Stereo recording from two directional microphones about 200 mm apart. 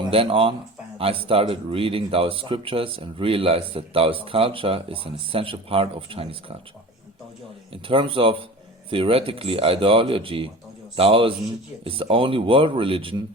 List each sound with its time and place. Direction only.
0.0 s speech: 25° right (ahead or behind)
7.7 s speech: 25° right (ahead or behind)